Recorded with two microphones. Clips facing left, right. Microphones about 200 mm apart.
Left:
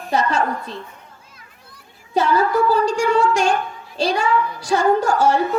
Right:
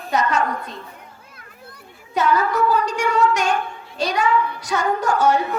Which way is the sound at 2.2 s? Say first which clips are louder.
Left 2 dB; 30° left (ahead or behind).